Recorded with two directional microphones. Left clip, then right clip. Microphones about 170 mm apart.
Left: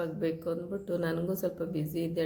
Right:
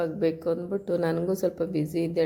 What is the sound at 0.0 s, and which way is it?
A woman's voice, 40° right (ahead or behind).